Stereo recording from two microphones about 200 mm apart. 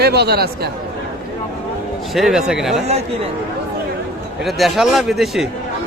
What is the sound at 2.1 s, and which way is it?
Speech, centre (ahead or behind).